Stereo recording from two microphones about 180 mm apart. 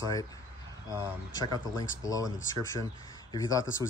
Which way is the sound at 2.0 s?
20° left (ahead or behind).